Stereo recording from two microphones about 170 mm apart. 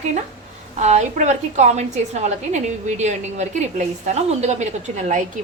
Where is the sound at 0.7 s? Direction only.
40° right (ahead or behind).